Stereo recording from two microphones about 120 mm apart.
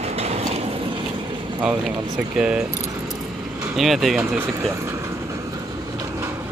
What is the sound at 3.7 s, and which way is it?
Speech, centre (ahead or behind).